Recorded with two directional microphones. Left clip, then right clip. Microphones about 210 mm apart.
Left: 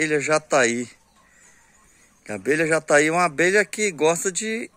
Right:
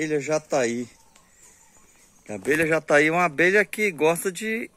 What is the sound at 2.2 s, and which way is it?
A man's voice, centre (ahead or behind).